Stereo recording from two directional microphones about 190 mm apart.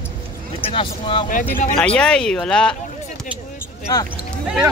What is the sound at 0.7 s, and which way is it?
Speech, 25° left (ahead or behind).